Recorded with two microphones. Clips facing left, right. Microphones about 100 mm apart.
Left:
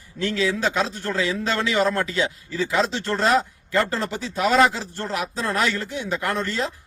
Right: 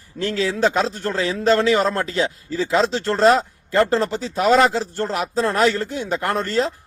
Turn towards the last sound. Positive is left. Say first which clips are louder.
# right 4 dB
turn(degrees=-35)  # may be behind; listen again after turning